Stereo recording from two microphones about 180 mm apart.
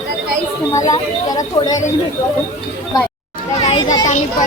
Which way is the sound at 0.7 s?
20° left (ahead or behind).